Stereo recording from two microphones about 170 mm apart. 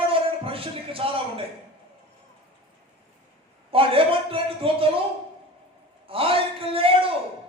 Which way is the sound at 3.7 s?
35° right (ahead or behind).